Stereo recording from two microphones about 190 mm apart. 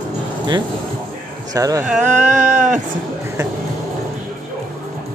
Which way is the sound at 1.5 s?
15° right (ahead or behind).